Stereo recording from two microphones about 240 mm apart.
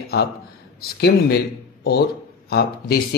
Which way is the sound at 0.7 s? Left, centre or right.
Left.